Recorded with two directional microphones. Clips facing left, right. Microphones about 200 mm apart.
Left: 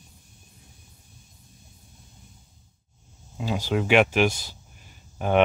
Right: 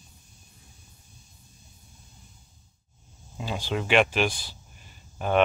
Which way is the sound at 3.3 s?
10° left (ahead or behind).